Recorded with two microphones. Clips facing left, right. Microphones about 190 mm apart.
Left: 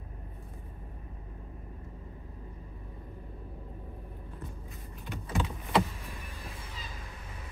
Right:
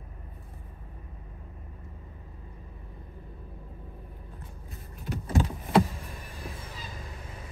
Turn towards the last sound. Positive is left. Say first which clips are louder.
# right 5 dB
turn(degrees=-40)  # may be behind; listen again after turning